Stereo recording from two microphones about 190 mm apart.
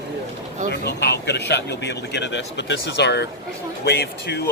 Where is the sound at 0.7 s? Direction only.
60° left (ahead or behind).